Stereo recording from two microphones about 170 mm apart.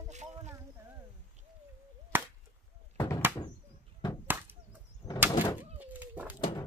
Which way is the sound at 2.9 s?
20° left (ahead or behind).